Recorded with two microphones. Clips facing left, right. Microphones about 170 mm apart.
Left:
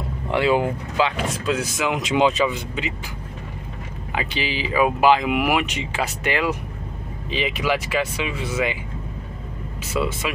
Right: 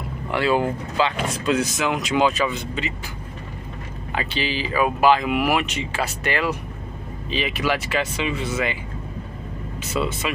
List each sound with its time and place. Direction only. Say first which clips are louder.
0.3 s speech: left 1 dB; 15° left (ahead or behind)
2.0 s speech: left 2 dB; 20° left (ahead or behind)
4.1 s speech: even; 15° left (ahead or behind)
9.9 s speech: left 1 dB; 5° left (ahead or behind)